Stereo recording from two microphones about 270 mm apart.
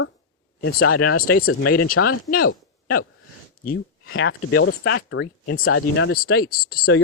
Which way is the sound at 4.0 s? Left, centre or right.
Left.